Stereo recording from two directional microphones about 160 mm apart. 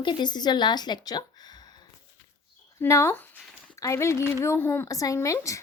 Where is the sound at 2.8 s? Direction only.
15° left (ahead or behind).